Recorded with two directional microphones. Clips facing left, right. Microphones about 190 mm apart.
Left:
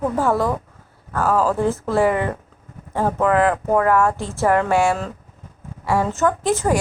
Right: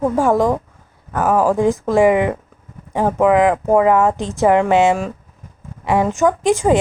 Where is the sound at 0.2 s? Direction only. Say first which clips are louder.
Right 5 dB; 15° right (ahead or behind).